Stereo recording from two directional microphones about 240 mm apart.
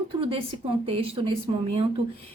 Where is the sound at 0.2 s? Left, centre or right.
Right.